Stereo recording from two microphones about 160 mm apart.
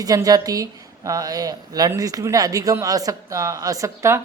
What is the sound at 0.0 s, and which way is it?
Speech, 25° right (ahead or behind).